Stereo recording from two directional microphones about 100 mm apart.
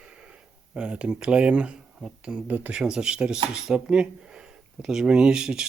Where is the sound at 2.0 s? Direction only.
5° right (ahead or behind).